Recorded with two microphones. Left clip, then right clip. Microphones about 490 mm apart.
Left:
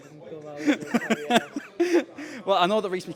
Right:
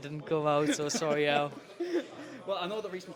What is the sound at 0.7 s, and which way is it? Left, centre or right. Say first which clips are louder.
Speech: left 7 dB; left.